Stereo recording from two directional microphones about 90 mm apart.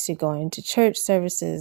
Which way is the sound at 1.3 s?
90° right.